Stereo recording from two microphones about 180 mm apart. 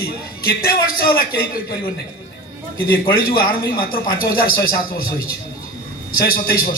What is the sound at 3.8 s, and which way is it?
A man's voice, 55° left (ahead or behind).